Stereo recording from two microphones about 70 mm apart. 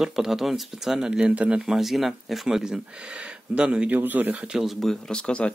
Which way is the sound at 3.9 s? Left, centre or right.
Right.